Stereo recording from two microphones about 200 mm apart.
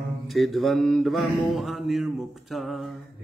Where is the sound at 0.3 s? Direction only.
Centre (ahead or behind).